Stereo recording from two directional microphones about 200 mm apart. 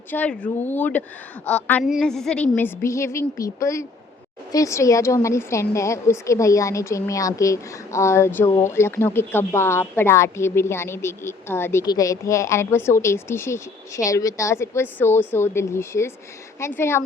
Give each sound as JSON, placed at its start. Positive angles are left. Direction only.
{"t": 0.1, "sound": "a woman's voice", "side_deg": 5}